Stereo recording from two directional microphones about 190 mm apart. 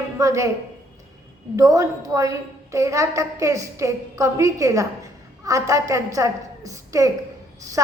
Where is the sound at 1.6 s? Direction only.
15° right (ahead or behind).